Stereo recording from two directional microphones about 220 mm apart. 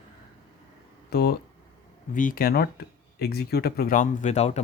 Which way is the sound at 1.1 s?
45° left (ahead or behind).